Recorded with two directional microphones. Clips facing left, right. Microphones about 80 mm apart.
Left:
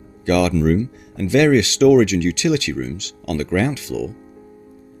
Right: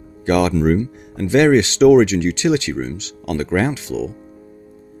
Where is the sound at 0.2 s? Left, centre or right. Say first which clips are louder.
Right 1 dB; right.